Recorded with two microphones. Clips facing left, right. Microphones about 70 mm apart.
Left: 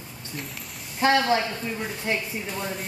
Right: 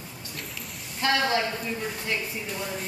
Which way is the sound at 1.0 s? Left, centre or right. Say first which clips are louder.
Left 4 dB; left.